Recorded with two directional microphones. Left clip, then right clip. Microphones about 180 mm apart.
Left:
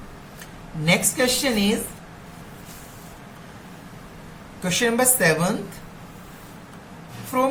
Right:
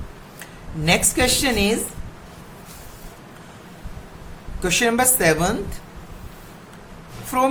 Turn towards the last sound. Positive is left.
turn(degrees=-55)  # may be behind; listen again after turning